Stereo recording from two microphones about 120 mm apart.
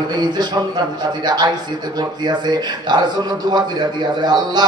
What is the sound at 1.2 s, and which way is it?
Speech, 35° right (ahead or behind).